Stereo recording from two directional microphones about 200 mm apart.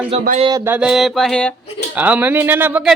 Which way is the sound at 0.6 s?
10° right (ahead or behind).